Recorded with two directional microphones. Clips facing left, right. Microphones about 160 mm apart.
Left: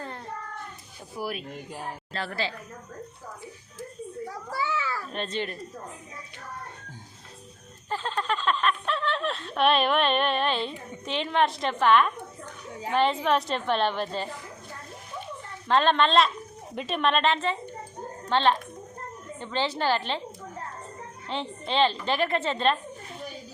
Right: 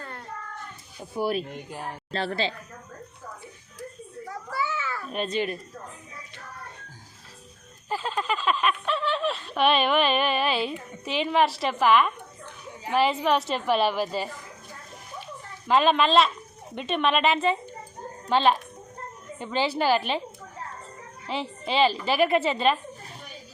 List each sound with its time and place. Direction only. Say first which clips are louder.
1.1 s a woman's voice: right 7 dB; 25° right (ahead or behind)
1.5 s speech: right 1 dB; centre (ahead or behind)
2.1 s a woman's voice: right 4 dB; 25° right (ahead or behind)
4.4 s children playing: even; 30° left (ahead or behind)
5.1 s a woman's voice: right 7 dB; 10° right (ahead or behind)
7.9 s speech: right 1 dB; 10° right (ahead or behind)
15.6 s a woman's voice: right 1 dB; 5° right (ahead or behind)
21.2 s a woman's voice: right 2 dB; 5° right (ahead or behind)